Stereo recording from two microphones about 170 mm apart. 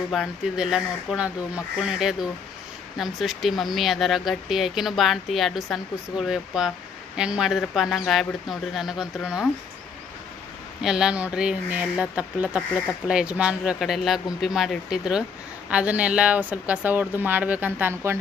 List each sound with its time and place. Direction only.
0.1 s speech: centre (ahead or behind)
10.8 s a woman's voice: 5° right (ahead or behind)